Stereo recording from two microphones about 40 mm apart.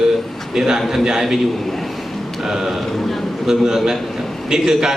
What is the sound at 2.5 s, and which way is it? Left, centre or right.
A man's voice, centre.